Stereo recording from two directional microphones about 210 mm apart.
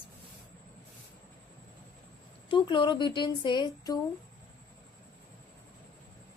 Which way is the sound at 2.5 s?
20° left (ahead or behind).